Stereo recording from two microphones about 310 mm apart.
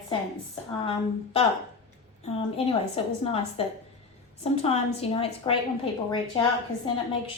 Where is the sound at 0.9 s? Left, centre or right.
Centre.